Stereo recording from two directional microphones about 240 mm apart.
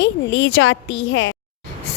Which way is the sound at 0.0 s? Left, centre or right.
Left.